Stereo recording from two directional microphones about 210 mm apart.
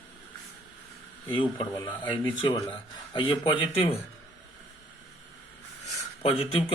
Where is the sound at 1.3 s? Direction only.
25° left (ahead or behind).